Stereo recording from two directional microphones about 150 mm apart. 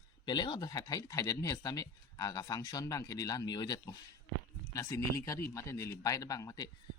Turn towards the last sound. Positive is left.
turn(degrees=25)  # may be behind; listen again after turning